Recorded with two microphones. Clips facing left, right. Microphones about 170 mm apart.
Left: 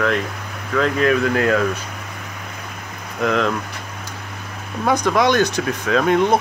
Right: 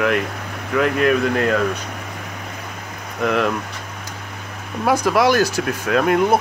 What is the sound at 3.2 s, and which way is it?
Speech, 5° right (ahead or behind).